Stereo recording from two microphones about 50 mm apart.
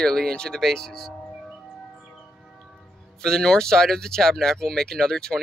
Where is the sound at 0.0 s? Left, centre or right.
Centre.